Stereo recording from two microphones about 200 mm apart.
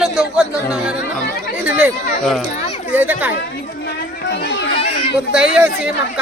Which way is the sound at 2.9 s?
10° right (ahead or behind).